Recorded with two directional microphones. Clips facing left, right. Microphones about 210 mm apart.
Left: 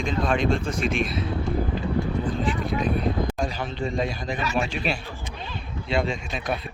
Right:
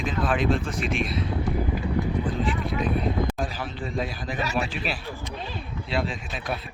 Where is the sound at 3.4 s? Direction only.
5° right (ahead or behind).